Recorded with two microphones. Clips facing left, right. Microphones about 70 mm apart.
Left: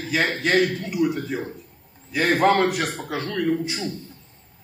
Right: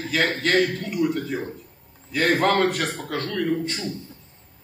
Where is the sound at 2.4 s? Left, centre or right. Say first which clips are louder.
Left 2 dB; centre.